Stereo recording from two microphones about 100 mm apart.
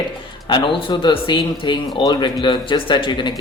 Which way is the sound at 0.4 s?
55° left (ahead or behind).